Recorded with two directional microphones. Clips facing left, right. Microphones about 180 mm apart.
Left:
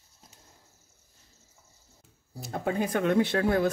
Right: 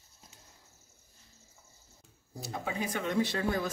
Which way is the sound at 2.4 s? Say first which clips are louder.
Left 6 dB; 55° left (ahead or behind).